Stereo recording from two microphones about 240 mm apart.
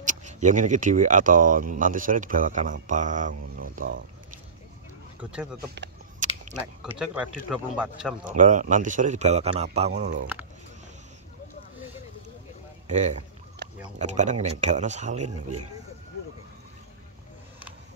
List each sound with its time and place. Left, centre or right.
0.0 s speech: right
6.2 s a sound: right
6.8 s speech: centre
8.3 s a man's voice: right
12.8 s speech: right
13.6 s a sound: right
13.9 s a man's voice: right